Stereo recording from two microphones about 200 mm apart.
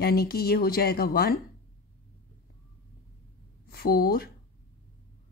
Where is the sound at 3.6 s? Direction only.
50° left (ahead or behind).